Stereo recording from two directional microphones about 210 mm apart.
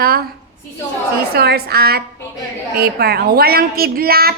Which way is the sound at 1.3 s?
50° right (ahead or behind).